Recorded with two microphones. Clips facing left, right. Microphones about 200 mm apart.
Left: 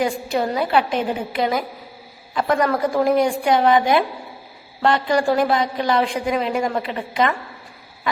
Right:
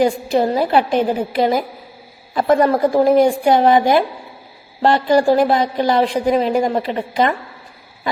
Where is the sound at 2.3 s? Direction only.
35° right (ahead or behind).